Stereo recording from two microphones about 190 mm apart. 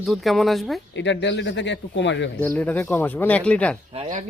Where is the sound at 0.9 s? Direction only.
70° left (ahead or behind).